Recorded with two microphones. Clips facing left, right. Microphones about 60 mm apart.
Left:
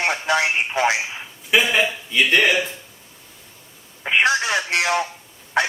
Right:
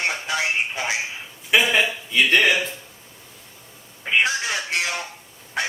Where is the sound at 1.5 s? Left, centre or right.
Centre.